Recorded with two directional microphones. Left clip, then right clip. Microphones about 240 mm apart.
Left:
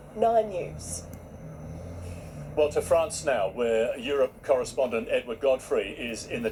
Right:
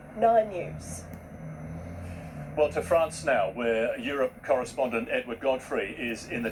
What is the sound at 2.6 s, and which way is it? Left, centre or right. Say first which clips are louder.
Speech: left 1 dB; left.